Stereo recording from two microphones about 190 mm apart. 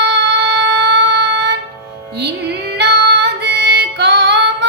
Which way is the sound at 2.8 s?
60° right (ahead or behind).